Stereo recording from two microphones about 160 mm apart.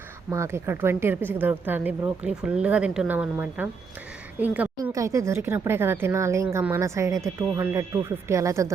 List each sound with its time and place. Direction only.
0.3 s a woman's voice: 15° right (ahead or behind)